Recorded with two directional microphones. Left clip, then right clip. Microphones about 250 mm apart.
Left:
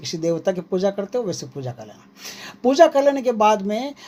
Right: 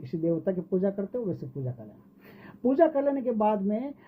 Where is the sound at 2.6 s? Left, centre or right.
Centre.